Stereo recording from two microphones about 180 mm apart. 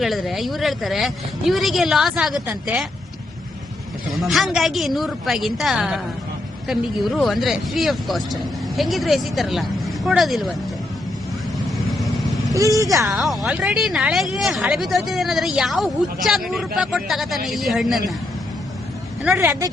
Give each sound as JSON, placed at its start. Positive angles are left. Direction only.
{"t": 0.0, "sound": "speech", "side_deg": 0}
{"t": 4.1, "sound": "speech", "side_deg": 0}
{"t": 11.9, "sound": "vehicle", "side_deg": 0}
{"t": 12.5, "sound": "speech", "side_deg": -20}
{"t": 13.1, "sound": "speech", "side_deg": 0}
{"t": 19.2, "sound": "speech", "side_deg": -10}